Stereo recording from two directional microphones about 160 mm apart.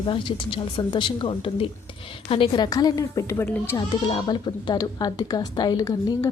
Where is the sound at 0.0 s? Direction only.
30° left (ahead or behind); by 3.8 s 15° left (ahead or behind).